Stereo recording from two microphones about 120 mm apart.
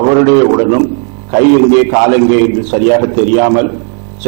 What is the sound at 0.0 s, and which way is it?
A man's voice, 25° right (ahead or behind).